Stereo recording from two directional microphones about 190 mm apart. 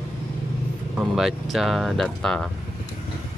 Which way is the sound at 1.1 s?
Centre (ahead or behind).